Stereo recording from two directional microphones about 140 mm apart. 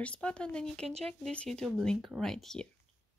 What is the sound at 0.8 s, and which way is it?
Speech, 45° right (ahead or behind).